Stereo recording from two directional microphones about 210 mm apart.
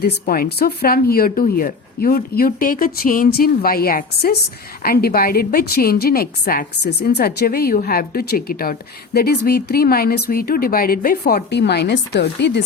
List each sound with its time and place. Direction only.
0.0 s speech: 45° left (ahead or behind)